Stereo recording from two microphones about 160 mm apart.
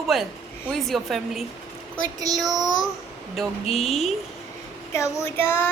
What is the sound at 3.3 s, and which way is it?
Speech, centre (ahead or behind).